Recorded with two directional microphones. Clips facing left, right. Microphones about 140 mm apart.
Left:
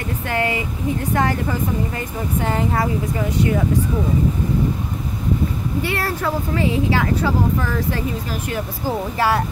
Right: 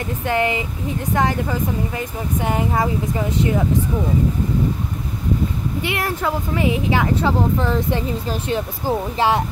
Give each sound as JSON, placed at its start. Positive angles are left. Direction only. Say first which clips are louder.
{"t": 0.3, "sound": "speech", "louder": "right 2 dB", "side_deg": -20}
{"t": 5.8, "sound": "speech", "louder": "left 1 dB", "side_deg": -15}